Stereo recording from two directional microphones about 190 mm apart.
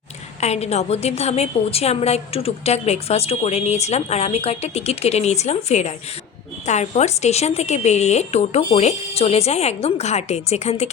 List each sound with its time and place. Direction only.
0.3 s a woman's voice: 35° left (ahead or behind)